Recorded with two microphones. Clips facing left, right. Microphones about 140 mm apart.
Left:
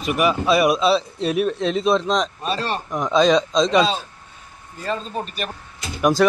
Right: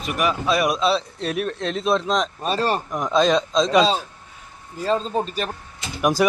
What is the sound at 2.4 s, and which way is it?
Speech, 40° right (ahead or behind).